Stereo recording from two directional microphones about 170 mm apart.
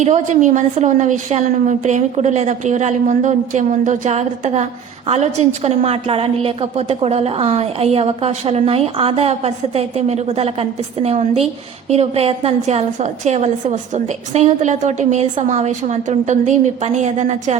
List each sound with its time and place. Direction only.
0.0 s a woman's voice: 45° right (ahead or behind)